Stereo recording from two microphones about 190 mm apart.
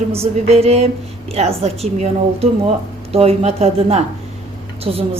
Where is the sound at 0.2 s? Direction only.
30° right (ahead or behind).